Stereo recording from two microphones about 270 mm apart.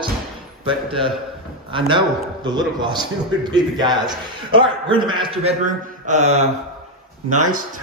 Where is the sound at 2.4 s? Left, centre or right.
Centre.